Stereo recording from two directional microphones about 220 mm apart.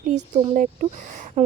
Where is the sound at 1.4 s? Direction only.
30° right (ahead or behind).